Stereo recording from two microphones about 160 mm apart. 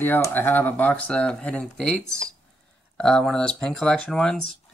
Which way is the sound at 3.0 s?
5° left (ahead or behind).